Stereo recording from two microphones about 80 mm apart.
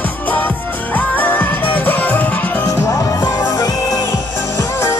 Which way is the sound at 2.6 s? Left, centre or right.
Left.